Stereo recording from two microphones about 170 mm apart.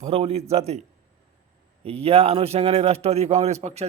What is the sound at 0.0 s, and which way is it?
Speech, 40° right (ahead or behind).